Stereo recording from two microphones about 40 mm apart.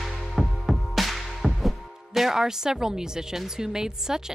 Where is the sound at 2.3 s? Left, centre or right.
Centre.